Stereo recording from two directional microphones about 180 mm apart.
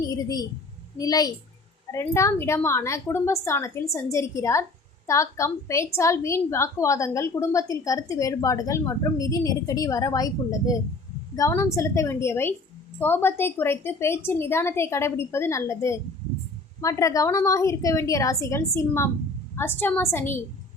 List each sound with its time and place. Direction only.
0.1 s a woman's voice: 20° left (ahead or behind)